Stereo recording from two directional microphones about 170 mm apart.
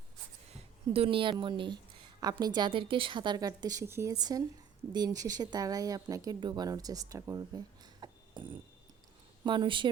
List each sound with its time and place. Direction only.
0.5 s a woman's voice: 35° right (ahead or behind); by 7.6 s 20° right (ahead or behind)
8.0 s a sound: 25° right (ahead or behind)
9.4 s a woman's voice: 30° right (ahead or behind)